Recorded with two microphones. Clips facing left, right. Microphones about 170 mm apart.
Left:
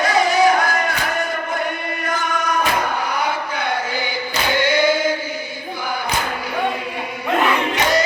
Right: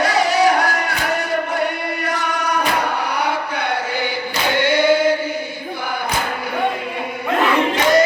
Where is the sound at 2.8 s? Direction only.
70° right (ahead or behind).